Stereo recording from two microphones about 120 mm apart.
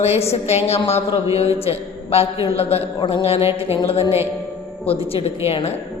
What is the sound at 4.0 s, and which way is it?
Speech, 20° right (ahead or behind).